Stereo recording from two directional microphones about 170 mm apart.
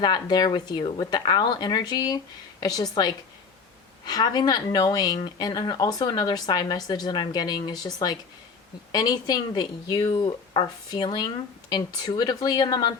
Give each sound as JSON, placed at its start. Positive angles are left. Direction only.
{"t": 0.0, "sound": "speech", "side_deg": 25}
{"t": 4.0, "sound": "speech", "side_deg": 25}